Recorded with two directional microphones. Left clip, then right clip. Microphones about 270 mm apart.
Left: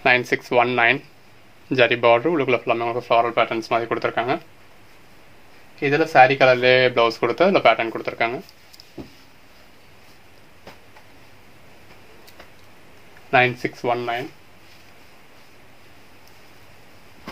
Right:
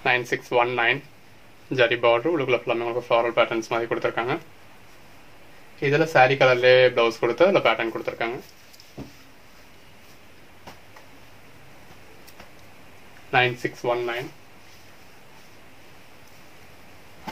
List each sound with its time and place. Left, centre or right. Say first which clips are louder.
0.0 s speech: left 5 dB; left
5.8 s speech: left 4 dB; left
13.3 s speech: left 4 dB; left